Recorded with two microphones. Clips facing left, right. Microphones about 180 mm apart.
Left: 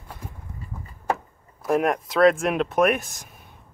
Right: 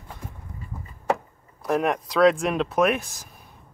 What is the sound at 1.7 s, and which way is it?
Speech, centre (ahead or behind).